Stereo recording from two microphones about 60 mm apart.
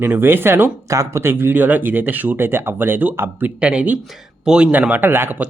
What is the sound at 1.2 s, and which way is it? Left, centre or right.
Speech, right.